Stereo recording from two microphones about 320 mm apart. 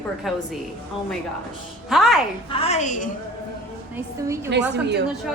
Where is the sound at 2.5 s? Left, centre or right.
Centre.